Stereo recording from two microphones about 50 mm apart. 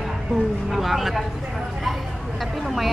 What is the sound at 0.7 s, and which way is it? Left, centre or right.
Speech, centre.